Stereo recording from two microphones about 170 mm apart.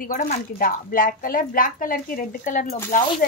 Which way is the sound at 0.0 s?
55° left (ahead or behind).